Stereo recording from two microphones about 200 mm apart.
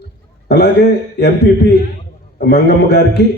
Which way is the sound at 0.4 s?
55° left (ahead or behind).